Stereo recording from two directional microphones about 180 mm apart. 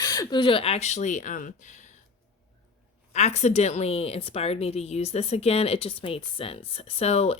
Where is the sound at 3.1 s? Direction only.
40° left (ahead or behind).